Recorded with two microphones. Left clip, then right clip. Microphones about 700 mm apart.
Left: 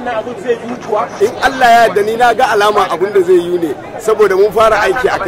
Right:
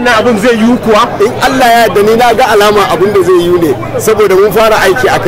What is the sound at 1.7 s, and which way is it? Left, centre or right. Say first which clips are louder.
Speech: right 2 dB; right.